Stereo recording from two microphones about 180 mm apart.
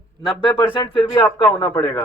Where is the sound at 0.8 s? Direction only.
25° left (ahead or behind).